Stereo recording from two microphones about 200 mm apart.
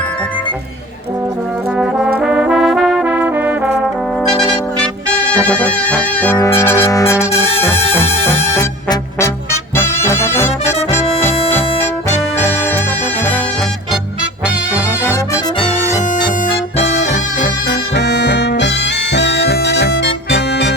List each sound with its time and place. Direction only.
1.7 s trombone: 5° right (ahead or behind)
2.1 s music: 5° right (ahead or behind)
4.2 s music: centre (ahead or behind)
14.4 s music: 5° right (ahead or behind)
14.8 s music: 15° left (ahead or behind)
15.5 s music: 30° left (ahead or behind)
16.0 s bagpipes: 40° left (ahead or behind)
17.7 s music: 60° left (ahead or behind)